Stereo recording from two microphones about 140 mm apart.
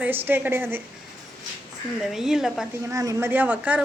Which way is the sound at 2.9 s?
25° right (ahead or behind).